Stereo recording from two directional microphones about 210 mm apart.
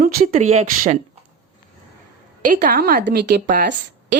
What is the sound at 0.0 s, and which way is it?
Speech, 40° right (ahead or behind).